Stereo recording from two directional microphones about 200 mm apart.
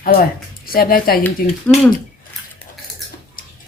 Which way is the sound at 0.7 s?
45° left (ahead or behind).